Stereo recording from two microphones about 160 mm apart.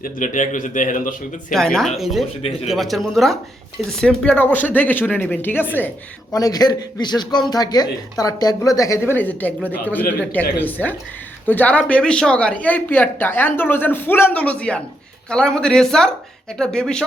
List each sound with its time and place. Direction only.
0.0 s a man's voice: 55° left (ahead or behind)
1.5 s a man's voice: 5° left (ahead or behind)
6.3 s a man's voice: 25° left (ahead or behind); by 17.1 s 5° left (ahead or behind)